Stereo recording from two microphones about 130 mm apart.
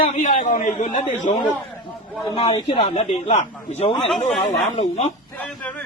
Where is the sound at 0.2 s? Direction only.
85° left.